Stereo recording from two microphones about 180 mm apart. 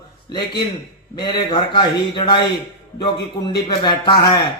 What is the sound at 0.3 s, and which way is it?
Speech, 25° left (ahead or behind).